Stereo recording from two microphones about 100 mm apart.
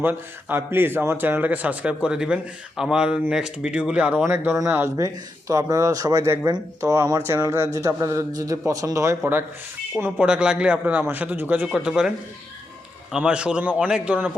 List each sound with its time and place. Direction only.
0.0 s a man's voice: 20° right (ahead or behind)
4.9 s speech: 35° right (ahead or behind)
10.0 s a man's voice: 15° right (ahead or behind)
13.1 s a man's voice: 10° right (ahead or behind)